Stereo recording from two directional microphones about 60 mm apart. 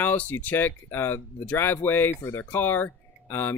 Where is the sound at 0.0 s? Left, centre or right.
Left.